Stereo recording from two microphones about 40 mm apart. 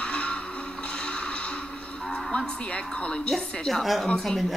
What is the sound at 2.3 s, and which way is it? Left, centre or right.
A woman's voice, left.